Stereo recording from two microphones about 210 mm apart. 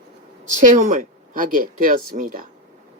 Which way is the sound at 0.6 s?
35° right (ahead or behind).